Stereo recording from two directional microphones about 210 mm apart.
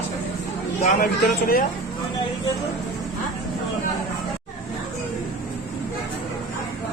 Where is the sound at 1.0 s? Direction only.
45° left (ahead or behind).